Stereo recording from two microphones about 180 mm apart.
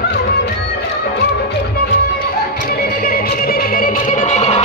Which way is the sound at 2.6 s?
60° left (ahead or behind).